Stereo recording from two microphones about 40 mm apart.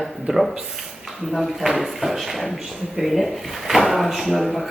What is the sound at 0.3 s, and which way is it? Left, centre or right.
Speech, centre.